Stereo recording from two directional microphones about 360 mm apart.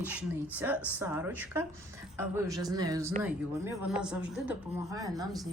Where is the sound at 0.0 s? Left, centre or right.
Centre.